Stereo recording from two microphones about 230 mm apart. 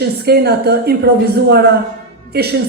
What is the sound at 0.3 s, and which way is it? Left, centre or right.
A man's voice, right.